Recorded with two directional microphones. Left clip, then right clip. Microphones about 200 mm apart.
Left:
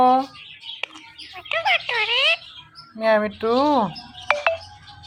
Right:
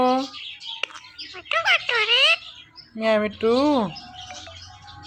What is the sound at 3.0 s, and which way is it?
Speech, 15° right (ahead or behind).